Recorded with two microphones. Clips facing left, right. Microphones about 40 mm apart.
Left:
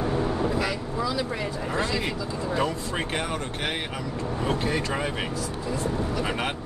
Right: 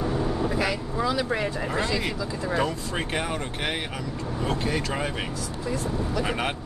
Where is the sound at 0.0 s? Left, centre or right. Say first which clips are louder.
Left 1 dB; centre.